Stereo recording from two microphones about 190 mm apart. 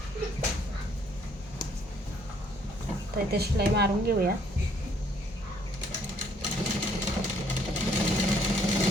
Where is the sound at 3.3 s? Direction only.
55° right (ahead or behind).